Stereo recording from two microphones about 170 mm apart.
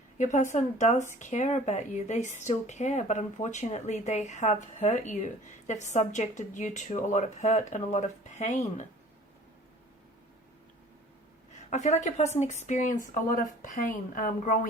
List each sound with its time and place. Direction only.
0.2 s speech: 45° left (ahead or behind)
11.7 s speech: 45° left (ahead or behind)